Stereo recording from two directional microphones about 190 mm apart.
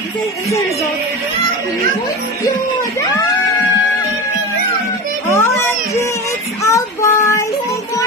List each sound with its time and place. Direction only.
5.3 s music: 15° left (ahead or behind)
6.6 s child singing: 15° left (ahead or behind)